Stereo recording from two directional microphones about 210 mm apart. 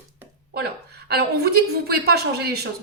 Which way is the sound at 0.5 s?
50° right (ahead or behind).